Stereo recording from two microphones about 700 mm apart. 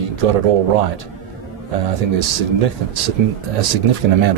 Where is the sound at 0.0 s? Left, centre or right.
Right.